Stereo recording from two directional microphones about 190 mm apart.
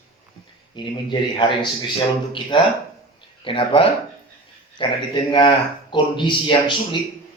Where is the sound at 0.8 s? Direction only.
25° left (ahead or behind).